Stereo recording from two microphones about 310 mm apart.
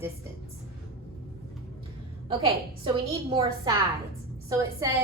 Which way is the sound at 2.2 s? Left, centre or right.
Centre.